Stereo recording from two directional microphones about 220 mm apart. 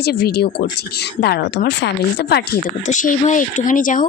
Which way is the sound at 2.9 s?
35° left (ahead or behind).